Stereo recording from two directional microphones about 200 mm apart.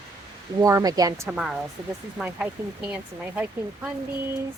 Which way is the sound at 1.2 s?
5° right (ahead or behind).